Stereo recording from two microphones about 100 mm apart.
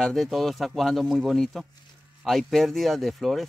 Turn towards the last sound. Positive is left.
turn(degrees=0)  # may be behind; listen again after turning